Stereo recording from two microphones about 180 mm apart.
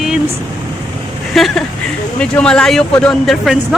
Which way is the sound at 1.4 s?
Centre (ahead or behind).